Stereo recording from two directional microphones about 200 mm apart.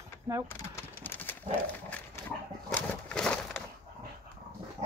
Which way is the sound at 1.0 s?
10° left (ahead or behind).